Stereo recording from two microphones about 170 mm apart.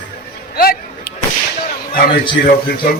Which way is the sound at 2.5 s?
60° left (ahead or behind).